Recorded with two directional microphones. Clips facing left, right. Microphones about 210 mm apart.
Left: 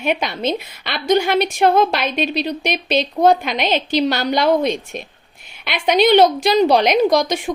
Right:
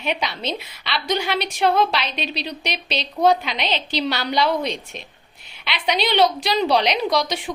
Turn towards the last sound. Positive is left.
turn(degrees=45)  # may be behind; listen again after turning